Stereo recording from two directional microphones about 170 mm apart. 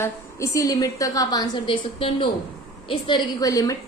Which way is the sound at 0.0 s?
20° left (ahead or behind).